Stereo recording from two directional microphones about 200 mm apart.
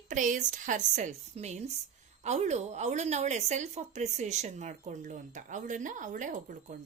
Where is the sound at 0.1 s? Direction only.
40° right (ahead or behind).